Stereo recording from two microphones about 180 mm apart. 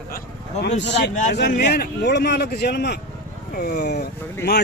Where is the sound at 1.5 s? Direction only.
50° left (ahead or behind).